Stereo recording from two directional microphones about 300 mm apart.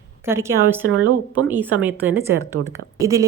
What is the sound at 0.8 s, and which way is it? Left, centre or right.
Speech, right.